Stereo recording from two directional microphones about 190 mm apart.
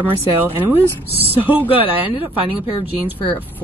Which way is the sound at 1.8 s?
25° left (ahead or behind).